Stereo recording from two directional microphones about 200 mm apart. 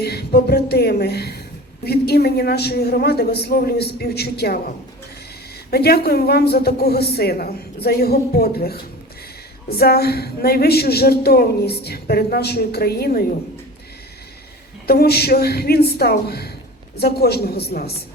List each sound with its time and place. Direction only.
0.0 s speech: 55° left (ahead or behind)
5.7 s speech: 55° left (ahead or behind)
14.8 s speech: 50° left (ahead or behind)